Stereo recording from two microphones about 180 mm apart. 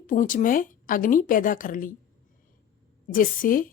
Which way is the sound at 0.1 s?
45° left (ahead or behind).